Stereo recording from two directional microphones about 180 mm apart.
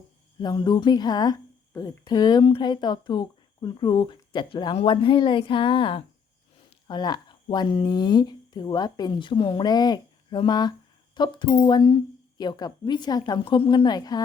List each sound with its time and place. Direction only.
0.4 s a woman's voice: 25° left (ahead or behind)